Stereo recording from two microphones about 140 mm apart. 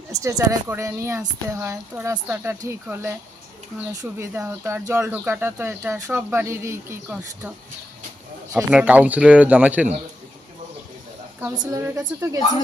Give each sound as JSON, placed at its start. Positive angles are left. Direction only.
{"t": 0.1, "sound": "speech", "side_deg": -25}
{"t": 4.2, "sound": "speech", "side_deg": -20}
{"t": 8.5, "sound": "speech", "side_deg": -10}
{"t": 11.5, "sound": "speech", "side_deg": -30}